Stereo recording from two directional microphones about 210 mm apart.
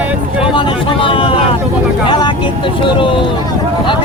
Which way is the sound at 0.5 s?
25° left (ahead or behind).